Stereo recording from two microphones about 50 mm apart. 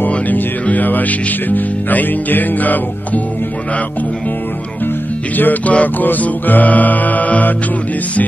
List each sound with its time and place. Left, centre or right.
0.1 s music: left
5.4 s music: left